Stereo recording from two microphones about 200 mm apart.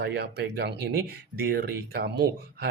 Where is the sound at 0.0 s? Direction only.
55° right (ahead or behind).